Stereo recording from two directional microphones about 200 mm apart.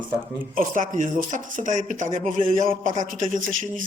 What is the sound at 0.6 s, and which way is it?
Speech, 40° right (ahead or behind).